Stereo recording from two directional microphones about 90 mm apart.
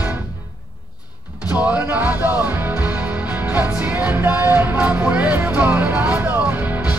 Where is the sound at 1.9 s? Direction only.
20° right (ahead or behind).